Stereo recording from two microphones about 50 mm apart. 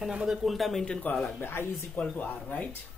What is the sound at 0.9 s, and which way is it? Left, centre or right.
Speech, left.